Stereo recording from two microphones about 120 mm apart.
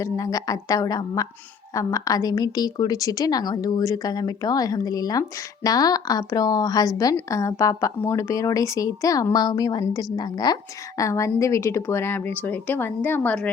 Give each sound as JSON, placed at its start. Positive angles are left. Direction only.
{"t": 0.0, "sound": "a woman's voice", "side_deg": 30}